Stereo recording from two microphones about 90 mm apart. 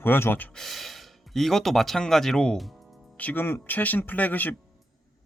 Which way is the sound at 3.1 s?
20° left (ahead or behind).